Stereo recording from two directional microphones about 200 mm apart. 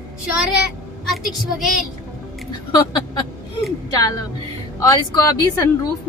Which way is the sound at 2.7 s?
20° left (ahead or behind).